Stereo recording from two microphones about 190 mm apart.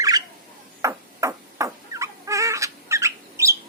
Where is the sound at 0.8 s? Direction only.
15° right (ahead or behind).